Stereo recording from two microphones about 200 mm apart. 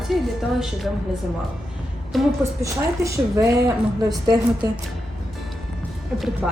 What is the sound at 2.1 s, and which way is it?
Speech, centre (ahead or behind).